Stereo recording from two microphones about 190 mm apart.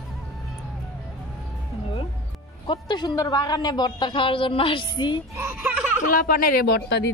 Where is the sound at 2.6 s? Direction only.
25° left (ahead or behind).